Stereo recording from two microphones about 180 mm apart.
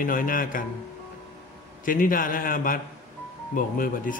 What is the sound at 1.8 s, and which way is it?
Speech, 50° left (ahead or behind).